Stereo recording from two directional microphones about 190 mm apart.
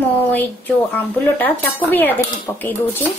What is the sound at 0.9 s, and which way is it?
Speech, 10° left (ahead or behind).